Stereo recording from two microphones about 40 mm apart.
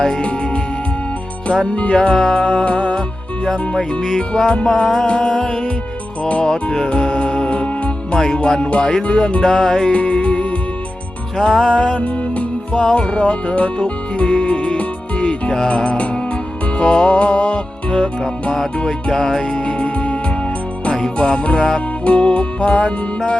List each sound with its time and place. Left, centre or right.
0.2 s music: left
2.0 s music: centre
3.8 s music: centre
5.0 s music: left
9.9 s music: left
11.3 s music: centre
11.7 s music: left
12.7 s music: centre
16.7 s music: left
19.1 s music: centre
19.8 s music: left
21.2 s music: left